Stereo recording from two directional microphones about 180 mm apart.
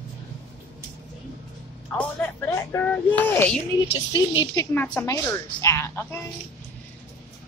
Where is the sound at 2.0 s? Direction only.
10° left (ahead or behind).